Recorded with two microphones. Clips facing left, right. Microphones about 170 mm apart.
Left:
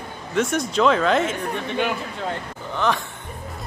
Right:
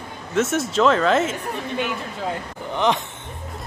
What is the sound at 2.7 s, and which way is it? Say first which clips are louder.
Speech: right 2 dB; 20° right (ahead or behind).